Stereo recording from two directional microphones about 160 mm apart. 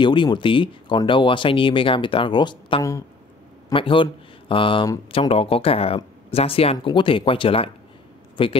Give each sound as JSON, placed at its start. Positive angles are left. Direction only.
{"t": 0.0, "sound": "speech", "side_deg": 30}